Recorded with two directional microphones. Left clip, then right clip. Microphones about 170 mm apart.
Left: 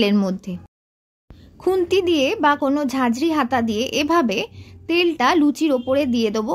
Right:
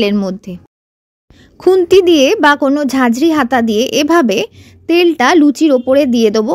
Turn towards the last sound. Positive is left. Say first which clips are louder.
# right 9 dB
turn(degrees=-40)  # may be behind; listen again after turning